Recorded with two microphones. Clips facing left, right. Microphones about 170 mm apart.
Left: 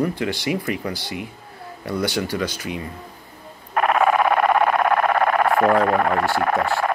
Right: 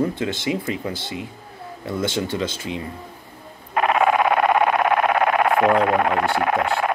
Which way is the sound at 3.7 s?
15° right (ahead or behind).